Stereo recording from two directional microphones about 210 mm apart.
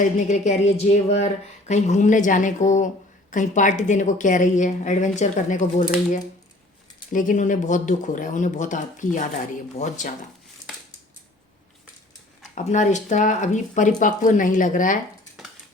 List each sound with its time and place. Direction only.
0.0 s speech: 35° left (ahead or behind)
7.1 s speech: 40° left (ahead or behind)
12.5 s speech: 35° left (ahead or behind)